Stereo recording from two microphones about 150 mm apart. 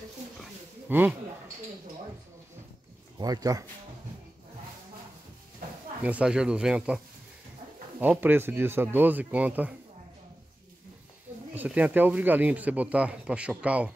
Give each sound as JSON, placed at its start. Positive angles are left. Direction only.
{"t": 0.8, "sound": "speech", "side_deg": -15}
{"t": 3.2, "sound": "speech", "side_deg": -25}
{"t": 6.0, "sound": "speech", "side_deg": -10}
{"t": 8.0, "sound": "speech", "side_deg": -15}
{"t": 11.5, "sound": "speech", "side_deg": -10}